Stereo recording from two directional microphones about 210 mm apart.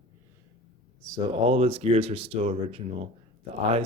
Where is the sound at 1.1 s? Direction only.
25° right (ahead or behind).